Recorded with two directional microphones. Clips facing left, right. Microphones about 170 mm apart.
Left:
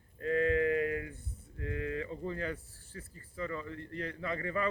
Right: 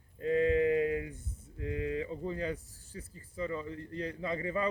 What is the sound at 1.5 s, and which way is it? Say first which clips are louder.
Speech: right 2 dB; 20° right (ahead or behind).